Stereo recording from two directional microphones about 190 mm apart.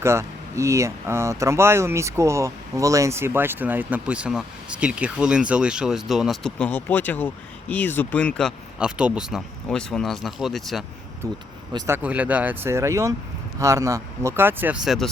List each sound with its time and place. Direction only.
0.0 s speech: 15° right (ahead or behind)
11.2 s speech: 15° right (ahead or behind); by 15.1 s centre (ahead or behind)